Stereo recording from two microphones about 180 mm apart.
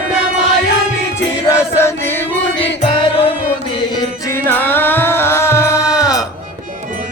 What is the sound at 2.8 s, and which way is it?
Music, 30° left (ahead or behind).